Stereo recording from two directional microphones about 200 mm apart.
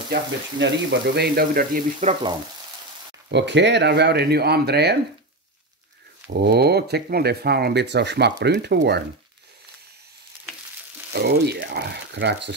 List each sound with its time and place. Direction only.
0.1 s speech: 60° right (ahead or behind); by 2.1 s 40° right (ahead or behind)
3.3 s speech: 60° right (ahead or behind)
6.3 s speech: 50° right (ahead or behind)
11.1 s speech: 55° right (ahead or behind)